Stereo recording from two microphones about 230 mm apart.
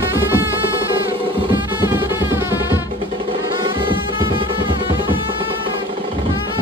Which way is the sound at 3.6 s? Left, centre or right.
Right.